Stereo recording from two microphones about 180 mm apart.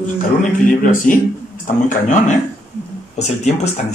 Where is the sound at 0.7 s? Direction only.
45° left (ahead or behind).